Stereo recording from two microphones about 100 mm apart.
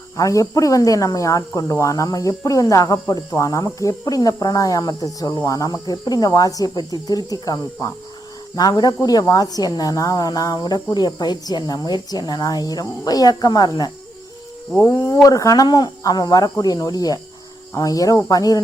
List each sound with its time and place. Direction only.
0.2 s speech: 35° left (ahead or behind)